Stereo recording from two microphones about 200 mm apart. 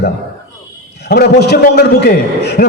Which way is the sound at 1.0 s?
55° left (ahead or behind).